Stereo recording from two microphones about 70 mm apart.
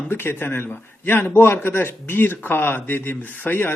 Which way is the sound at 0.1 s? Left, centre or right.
Left.